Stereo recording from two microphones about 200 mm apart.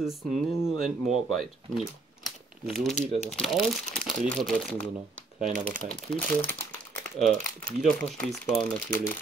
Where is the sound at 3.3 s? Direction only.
Centre (ahead or behind).